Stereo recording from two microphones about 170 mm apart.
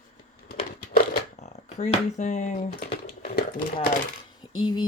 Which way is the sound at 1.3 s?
45° left (ahead or behind).